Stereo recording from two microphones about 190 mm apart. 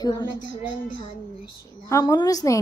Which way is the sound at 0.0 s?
20° left (ahead or behind).